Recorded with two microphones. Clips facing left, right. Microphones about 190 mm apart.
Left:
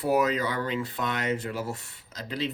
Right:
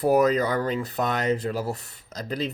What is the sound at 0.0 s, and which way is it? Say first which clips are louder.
Speech: right 5 dB; 40° right (ahead or behind).